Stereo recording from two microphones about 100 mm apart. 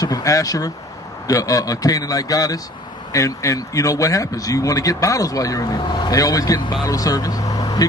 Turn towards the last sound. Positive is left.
turn(degrees=40)  # may be behind; listen again after turning